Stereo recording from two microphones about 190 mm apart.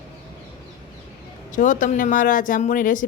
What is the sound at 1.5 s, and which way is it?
Speech, 40° left (ahead or behind).